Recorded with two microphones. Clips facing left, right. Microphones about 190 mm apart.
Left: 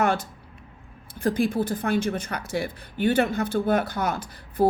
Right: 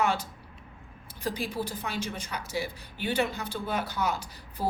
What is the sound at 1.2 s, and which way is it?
Speech, 50° left (ahead or behind).